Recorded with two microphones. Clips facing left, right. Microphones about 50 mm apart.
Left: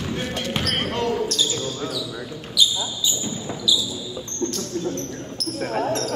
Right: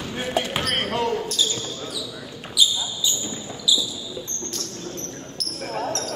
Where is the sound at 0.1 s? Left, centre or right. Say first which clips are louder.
Right 3 dB; centre.